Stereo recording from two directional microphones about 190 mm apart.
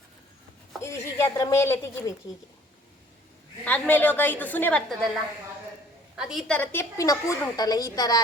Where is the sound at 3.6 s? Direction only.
10° left (ahead or behind).